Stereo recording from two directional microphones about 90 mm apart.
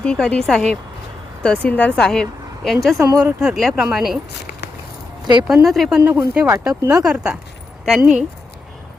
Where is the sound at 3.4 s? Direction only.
5° right (ahead or behind).